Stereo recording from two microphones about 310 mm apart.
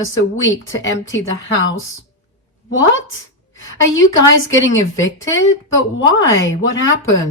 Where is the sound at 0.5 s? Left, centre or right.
Left.